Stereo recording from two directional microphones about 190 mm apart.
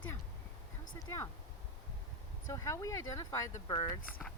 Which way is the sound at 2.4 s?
15° left (ahead or behind).